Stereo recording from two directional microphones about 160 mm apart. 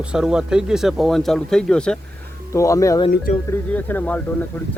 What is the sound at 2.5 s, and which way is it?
Speech, 20° left (ahead or behind).